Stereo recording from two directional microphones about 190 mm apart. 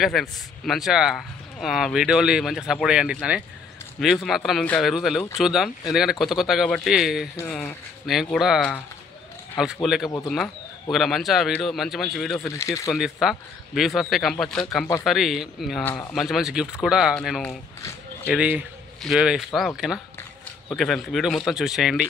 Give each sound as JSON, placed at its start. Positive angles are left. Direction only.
{"t": 0.0, "sound": "speech", "side_deg": 0}
{"t": 7.3, "sound": "speech", "side_deg": 10}
{"t": 12.4, "sound": "speech", "side_deg": 15}
{"t": 12.9, "sound": "speech", "side_deg": 0}
{"t": 15.8, "sound": "speech", "side_deg": 10}
{"t": 16.2, "sound": "speech", "side_deg": 0}